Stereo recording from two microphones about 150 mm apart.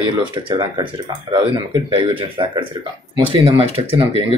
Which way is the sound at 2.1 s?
35° right (ahead or behind).